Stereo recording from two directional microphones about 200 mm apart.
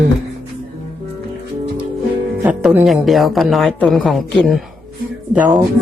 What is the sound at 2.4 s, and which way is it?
Speech, 5° right (ahead or behind).